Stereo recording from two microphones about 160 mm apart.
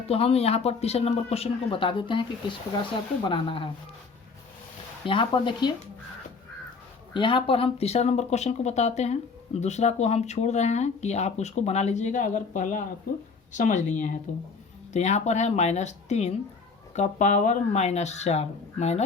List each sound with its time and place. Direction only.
0.1 s speech: 40° left (ahead or behind)
3.2 s speech: 30° left (ahead or behind)
5.0 s speech: 30° left (ahead or behind)
7.1 s speech: 30° left (ahead or behind)